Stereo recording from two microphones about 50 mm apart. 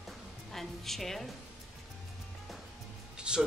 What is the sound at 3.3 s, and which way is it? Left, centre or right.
Speech, centre.